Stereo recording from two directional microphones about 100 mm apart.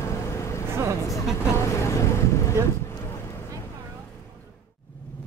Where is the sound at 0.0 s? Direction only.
30° left (ahead or behind).